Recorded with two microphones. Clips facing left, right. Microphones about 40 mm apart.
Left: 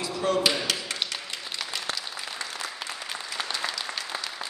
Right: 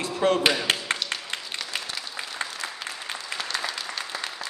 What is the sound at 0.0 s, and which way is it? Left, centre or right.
Speech, right.